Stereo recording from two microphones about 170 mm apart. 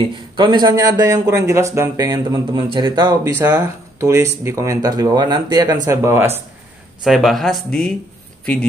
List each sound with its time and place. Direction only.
0.0 s speech: 25° right (ahead or behind)
3.3 s speech: 10° right (ahead or behind)
7.0 s speech: centre (ahead or behind)